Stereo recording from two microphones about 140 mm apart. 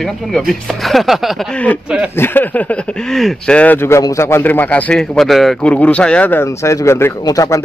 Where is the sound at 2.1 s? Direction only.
15° left (ahead or behind).